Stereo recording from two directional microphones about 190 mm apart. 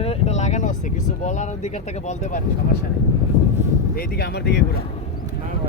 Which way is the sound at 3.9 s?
55° left (ahead or behind).